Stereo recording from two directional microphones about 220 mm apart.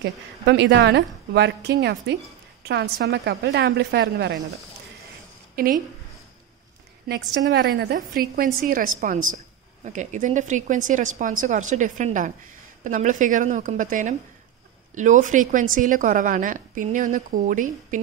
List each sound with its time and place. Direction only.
0.0 s a woman's voice: 50° right (ahead or behind)
7.1 s a woman's voice: 50° right (ahead or behind)